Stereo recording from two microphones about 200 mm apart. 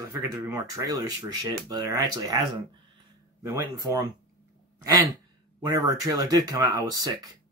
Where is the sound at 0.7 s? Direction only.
20° right (ahead or behind).